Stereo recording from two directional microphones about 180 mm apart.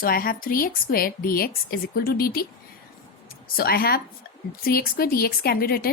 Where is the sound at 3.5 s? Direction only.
60° left (ahead or behind).